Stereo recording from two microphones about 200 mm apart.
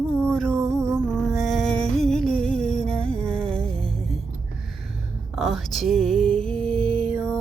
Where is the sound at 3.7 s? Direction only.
30° right (ahead or behind).